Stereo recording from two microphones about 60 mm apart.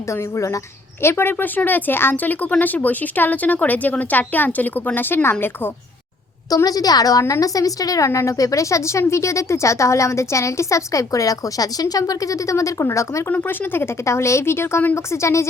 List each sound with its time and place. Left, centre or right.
0.1 s a woman's voice: left
1.0 s speech: left
6.7 s a woman's voice: left
13.3 s speech: left
14.9 s a woman's voice: left